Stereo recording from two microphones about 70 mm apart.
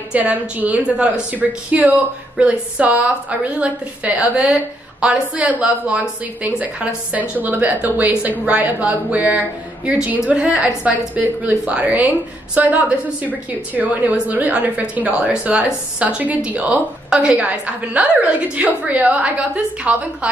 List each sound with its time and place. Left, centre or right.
0.1 s a woman's voice: right